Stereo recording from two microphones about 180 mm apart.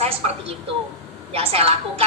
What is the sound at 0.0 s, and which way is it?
A woman's voice, 35° right (ahead or behind).